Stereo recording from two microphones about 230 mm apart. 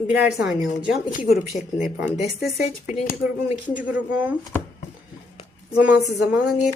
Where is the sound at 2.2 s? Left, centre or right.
Centre.